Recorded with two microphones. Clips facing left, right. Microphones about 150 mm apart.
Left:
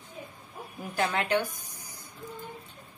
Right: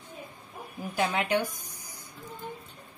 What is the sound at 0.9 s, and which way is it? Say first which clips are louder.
Speech: even; 10° right (ahead or behind).